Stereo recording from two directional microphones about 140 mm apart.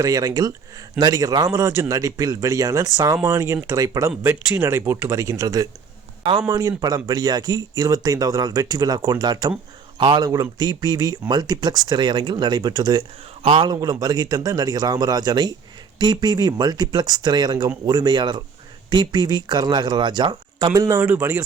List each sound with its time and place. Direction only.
0.0 s speech: 25° right (ahead or behind)
13.4 s a man's voice: 45° right (ahead or behind)
13.7 s speech: 30° right (ahead or behind)